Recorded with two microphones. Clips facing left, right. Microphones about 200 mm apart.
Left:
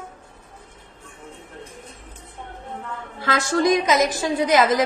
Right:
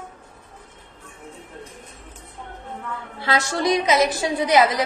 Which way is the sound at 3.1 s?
45° left (ahead or behind).